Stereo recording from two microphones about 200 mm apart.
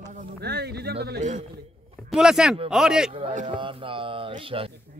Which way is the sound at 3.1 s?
25° right (ahead or behind).